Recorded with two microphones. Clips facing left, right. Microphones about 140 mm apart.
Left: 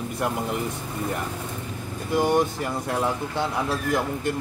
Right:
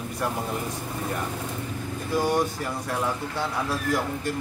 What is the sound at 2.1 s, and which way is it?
Speech, 20° left (ahead or behind).